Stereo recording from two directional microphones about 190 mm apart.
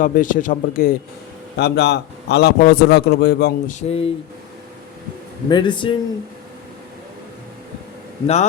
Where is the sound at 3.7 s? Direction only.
35° left (ahead or behind).